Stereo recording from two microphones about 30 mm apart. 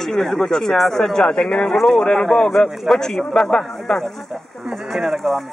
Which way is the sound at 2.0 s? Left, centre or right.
Left.